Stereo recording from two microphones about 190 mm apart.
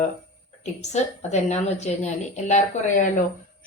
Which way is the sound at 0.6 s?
35° left (ahead or behind).